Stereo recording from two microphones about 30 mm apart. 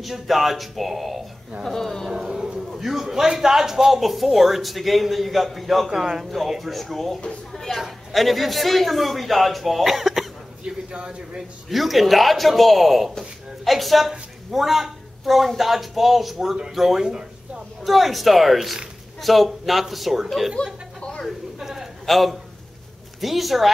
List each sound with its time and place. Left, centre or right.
0.0 s a man's voice: centre
2.2 s speech: right
2.7 s a man's voice: centre
7.5 s chatter: centre
8.1 s a man's voice: centre
10.6 s a man's voice: right
11.7 s a man's voice: centre
17.8 s a man's voice: centre
20.6 s speech: left
21.5 s a sound: centre
22.0 s a man's voice: centre